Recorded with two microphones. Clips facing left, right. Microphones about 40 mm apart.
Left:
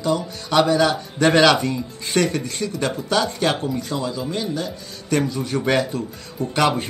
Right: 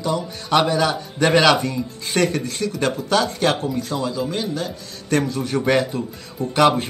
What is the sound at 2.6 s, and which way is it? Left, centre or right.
Speech, centre.